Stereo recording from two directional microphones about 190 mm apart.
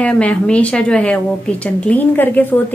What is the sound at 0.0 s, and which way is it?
A woman's voice, 5° left (ahead or behind).